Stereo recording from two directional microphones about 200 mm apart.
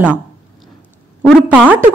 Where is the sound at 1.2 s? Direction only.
5° right (ahead or behind).